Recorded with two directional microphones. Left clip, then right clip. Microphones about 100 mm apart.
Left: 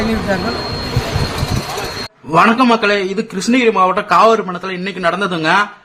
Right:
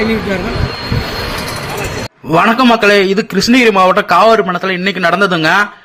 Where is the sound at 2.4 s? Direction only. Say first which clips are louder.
Right 5 dB; 55° right (ahead or behind).